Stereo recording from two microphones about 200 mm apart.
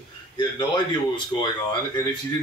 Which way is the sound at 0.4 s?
20° left (ahead or behind).